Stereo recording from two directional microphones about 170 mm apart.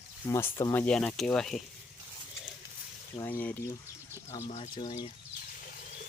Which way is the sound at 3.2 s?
10° left (ahead or behind).